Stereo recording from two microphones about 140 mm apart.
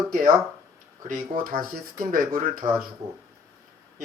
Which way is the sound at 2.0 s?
75° right (ahead or behind).